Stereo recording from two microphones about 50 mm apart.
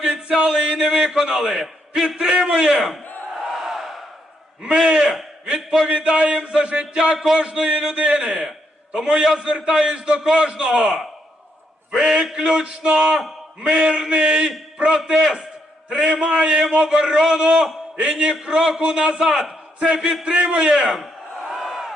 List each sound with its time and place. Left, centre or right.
0.0 s a man's voice: centre
3.0 s battle cry: left
3.6 s crowd: centre
4.6 s a man's voice: centre
20.7 s a man's voice: centre
21.5 s crowd: centre